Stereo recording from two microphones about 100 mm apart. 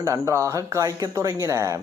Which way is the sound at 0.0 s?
30° right (ahead or behind).